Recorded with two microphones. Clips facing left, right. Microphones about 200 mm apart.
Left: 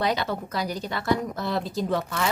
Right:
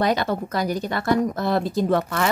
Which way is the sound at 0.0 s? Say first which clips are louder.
Right 4 dB; 50° right (ahead or behind).